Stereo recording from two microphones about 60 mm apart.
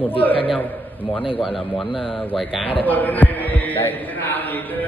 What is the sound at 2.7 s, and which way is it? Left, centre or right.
Heart sounds, left.